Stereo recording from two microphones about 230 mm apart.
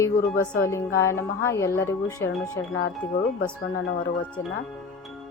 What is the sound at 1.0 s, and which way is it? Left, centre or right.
Speech, centre.